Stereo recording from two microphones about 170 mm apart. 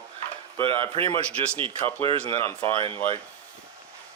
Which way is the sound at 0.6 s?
30° right (ahead or behind).